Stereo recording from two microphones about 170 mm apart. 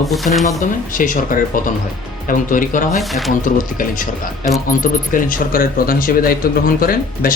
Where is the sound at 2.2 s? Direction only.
50° left (ahead or behind).